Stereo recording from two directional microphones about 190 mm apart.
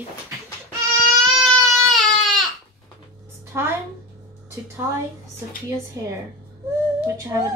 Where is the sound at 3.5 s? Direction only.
15° right (ahead or behind).